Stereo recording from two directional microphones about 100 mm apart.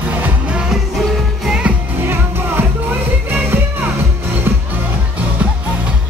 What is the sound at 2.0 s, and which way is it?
Music, 20° right (ahead or behind).